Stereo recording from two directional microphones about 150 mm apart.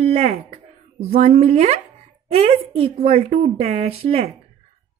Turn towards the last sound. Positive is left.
turn(degrees=-40)  # may be behind; listen again after turning